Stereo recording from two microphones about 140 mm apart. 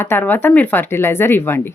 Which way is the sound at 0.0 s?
15° left (ahead or behind).